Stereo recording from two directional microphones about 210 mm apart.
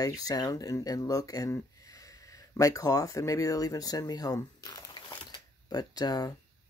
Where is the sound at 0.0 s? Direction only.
15° left (ahead or behind).